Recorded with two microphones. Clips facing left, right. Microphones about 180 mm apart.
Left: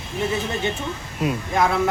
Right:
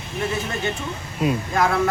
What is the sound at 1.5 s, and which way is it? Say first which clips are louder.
Speech: left 3 dB; 20° left (ahead or behind).